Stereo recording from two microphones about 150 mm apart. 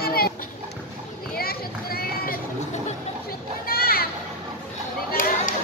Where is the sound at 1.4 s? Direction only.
90° left.